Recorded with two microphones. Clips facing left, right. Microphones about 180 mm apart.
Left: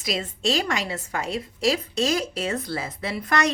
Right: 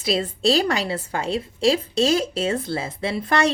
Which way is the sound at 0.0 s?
30° right (ahead or behind).